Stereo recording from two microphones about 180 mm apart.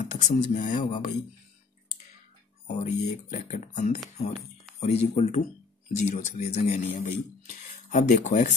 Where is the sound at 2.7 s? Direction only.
45° left (ahead or behind).